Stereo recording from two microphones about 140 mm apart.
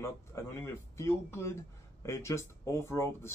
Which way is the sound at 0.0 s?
20° left (ahead or behind).